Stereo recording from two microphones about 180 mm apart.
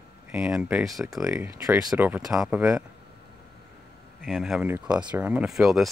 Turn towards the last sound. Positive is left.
turn(degrees=0)  # may be behind; listen again after turning